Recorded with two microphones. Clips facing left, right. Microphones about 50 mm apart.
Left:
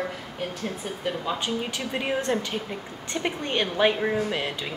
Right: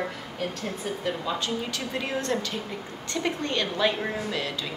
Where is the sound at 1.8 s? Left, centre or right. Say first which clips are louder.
Left 2 dB; left.